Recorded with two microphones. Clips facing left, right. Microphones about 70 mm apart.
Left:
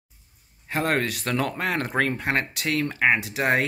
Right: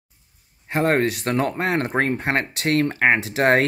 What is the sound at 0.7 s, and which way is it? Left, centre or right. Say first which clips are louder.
Speech: right 5 dB; right.